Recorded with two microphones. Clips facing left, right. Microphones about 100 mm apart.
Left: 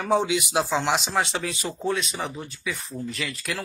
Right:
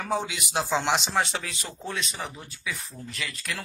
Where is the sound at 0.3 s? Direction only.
Centre (ahead or behind).